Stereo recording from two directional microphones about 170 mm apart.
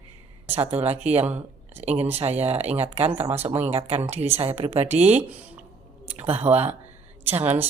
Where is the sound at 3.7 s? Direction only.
35° right (ahead or behind).